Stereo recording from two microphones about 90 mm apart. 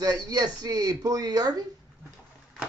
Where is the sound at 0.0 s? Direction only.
45° right (ahead or behind).